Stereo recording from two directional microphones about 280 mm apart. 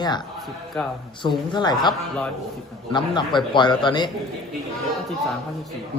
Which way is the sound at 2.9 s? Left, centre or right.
Centre.